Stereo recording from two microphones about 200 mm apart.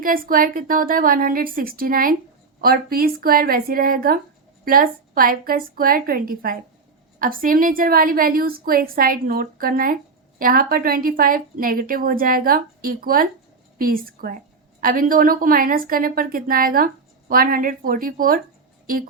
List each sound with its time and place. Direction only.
0.0 s a woman's voice: 45° right (ahead or behind)